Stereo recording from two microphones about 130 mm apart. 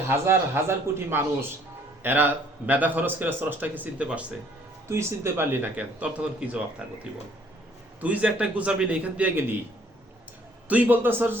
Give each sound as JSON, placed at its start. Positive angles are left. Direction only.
{"t": 0.1, "sound": "a man's voice", "side_deg": -20}
{"t": 4.9, "sound": "speech", "side_deg": -20}
{"t": 8.0, "sound": "speech", "side_deg": -10}
{"t": 10.7, "sound": "speech", "side_deg": -15}